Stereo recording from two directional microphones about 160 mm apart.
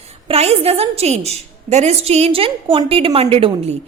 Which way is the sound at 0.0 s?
40° right (ahead or behind).